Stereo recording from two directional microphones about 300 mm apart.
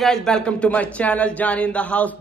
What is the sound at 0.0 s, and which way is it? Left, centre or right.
Speech, centre.